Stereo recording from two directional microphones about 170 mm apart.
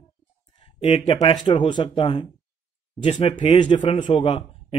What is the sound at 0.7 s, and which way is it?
Speech, 30° left (ahead or behind).